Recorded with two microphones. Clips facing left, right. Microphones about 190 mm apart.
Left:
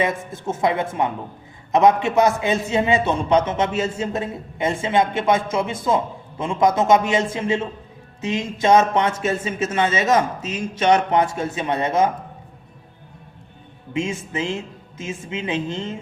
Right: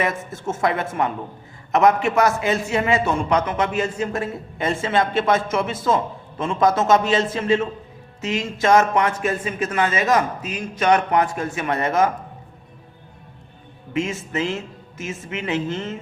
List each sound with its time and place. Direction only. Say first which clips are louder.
0.4 s a man's voice: left 1 dB; 15° left (ahead or behind)
13.9 s a man's voice: right 1 dB; 15° left (ahead or behind)